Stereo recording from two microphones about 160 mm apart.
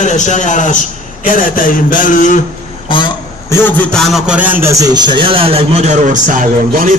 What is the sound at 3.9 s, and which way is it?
A man's voice, centre (ahead or behind).